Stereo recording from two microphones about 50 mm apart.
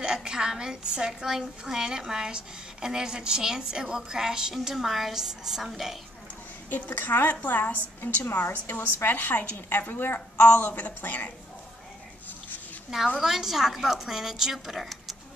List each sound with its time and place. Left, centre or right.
0.0 s a woman's voice: centre
6.7 s a woman's voice: left
13.2 s a woman's voice: centre